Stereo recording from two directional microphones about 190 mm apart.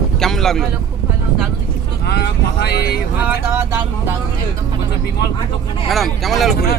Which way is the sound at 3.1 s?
10° right (ahead or behind).